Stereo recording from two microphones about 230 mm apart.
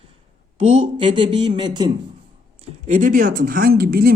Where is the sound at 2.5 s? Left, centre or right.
Right.